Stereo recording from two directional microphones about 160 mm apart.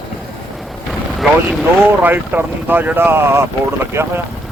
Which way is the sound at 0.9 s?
Centre (ahead or behind).